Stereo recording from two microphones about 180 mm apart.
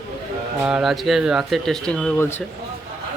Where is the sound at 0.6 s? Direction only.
5° right (ahead or behind).